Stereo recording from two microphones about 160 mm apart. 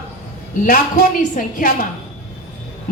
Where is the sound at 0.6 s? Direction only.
60° left (ahead or behind).